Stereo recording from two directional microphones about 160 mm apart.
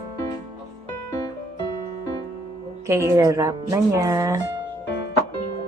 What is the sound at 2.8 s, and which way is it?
Speech, 20° right (ahead or behind).